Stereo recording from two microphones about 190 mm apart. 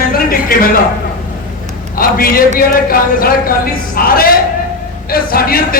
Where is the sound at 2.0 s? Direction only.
50° left (ahead or behind).